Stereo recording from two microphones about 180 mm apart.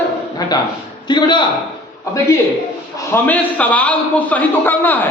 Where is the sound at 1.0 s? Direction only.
25° left (ahead or behind).